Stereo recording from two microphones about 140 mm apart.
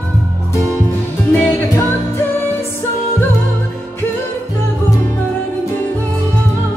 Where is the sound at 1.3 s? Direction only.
10° left (ahead or behind).